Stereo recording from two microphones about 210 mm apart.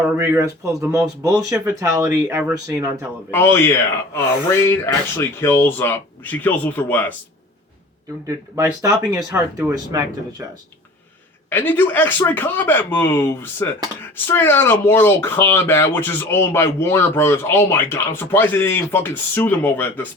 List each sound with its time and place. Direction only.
0.2 s speech: 10° right (ahead or behind)
3.3 s speech: 10° left (ahead or behind)
8.3 s speech: 15° right (ahead or behind)
11.4 s speech: 10° left (ahead or behind)